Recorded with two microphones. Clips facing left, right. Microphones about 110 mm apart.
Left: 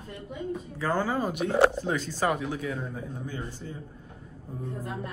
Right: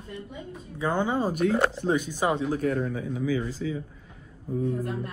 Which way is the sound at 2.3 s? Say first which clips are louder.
Right 5 dB; 40° right (ahead or behind).